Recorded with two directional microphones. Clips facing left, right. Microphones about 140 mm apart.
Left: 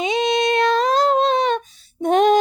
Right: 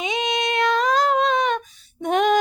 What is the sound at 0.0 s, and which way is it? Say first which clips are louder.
Female singing: left 5 dB; 35° left (ahead or behind).